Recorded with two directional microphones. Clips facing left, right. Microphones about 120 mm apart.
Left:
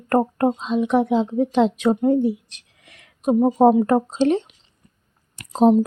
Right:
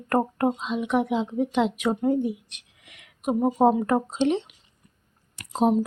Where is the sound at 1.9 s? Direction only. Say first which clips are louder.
Left 5 dB; 25° left (ahead or behind).